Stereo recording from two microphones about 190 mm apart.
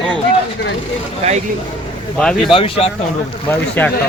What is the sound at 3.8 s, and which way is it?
Speech, 10° left (ahead or behind).